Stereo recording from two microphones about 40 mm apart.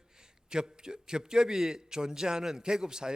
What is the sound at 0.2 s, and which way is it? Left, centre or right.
A man's voice, centre.